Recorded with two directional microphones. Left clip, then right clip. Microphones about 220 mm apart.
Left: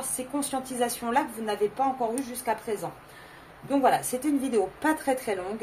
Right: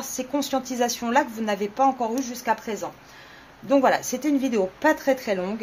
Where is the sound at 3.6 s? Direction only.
40° right (ahead or behind).